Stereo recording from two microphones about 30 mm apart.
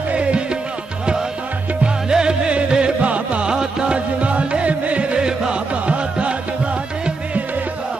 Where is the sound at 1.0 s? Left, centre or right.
Right.